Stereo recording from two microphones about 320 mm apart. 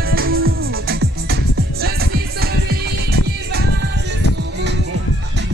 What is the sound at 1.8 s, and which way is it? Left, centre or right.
Music, right.